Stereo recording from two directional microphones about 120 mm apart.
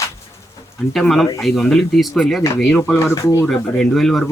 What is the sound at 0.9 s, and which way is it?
Speech, centre (ahead or behind).